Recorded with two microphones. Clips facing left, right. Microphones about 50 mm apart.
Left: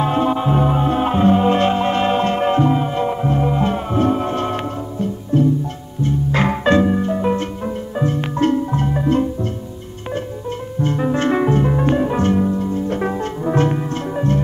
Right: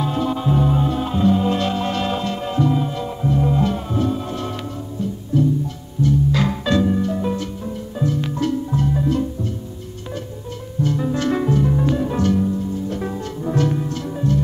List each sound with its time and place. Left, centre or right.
0.0 s music: left
10.8 s music: left